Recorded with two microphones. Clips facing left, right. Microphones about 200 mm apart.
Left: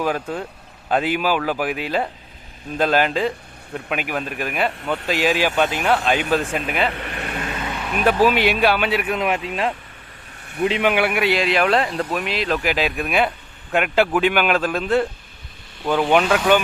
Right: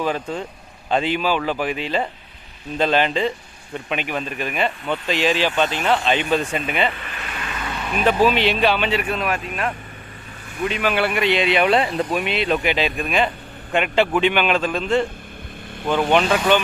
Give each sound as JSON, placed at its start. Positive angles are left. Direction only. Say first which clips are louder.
{"t": 0.0, "sound": "speech", "louder": "even", "side_deg": 5}
{"t": 6.9, "sound": "vehicle", "louder": "left 5 dB", "side_deg": 65}
{"t": 7.9, "sound": "speech", "louder": "even", "side_deg": 5}
{"t": 10.6, "sound": "speech", "louder": "left 3 dB", "side_deg": 20}
{"t": 10.9, "sound": "speech", "louder": "even", "side_deg": 10}